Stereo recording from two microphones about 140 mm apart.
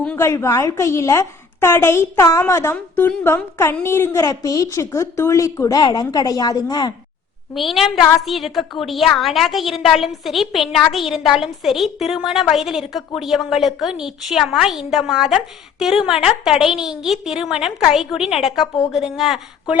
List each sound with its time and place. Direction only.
0.2 s a woman's voice: 20° left (ahead or behind)
7.5 s a woman's voice: centre (ahead or behind)